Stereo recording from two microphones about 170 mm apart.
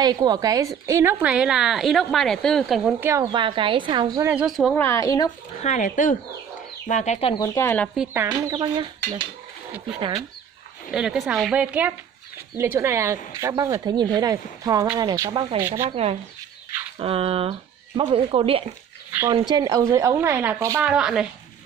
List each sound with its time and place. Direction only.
0.0 s a woman's voice: 25° right (ahead or behind)
3.3 s speech: 30° right (ahead or behind)
4.2 s speech: 10° right (ahead or behind)
4.7 s a woman's voice: 15° left (ahead or behind)
5.6 s speech: 45° left (ahead or behind)
7.4 s a woman's voice: 15° left (ahead or behind)
7.9 s a woman's voice: 10° right (ahead or behind)
8.5 s speech: 25° right (ahead or behind)
10.9 s a woman's voice: 5° right (ahead or behind)
15.9 s speech: 35° right (ahead or behind); by 20.8 s 15° right (ahead or behind)
20.8 s speech: 5° right (ahead or behind)